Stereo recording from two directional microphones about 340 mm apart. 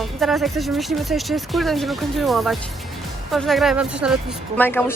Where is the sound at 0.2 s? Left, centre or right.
Centre.